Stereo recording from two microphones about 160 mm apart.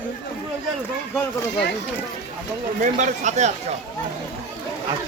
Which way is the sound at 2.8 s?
50° right (ahead or behind).